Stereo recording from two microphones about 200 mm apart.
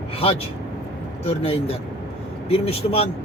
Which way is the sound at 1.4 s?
30° left (ahead or behind).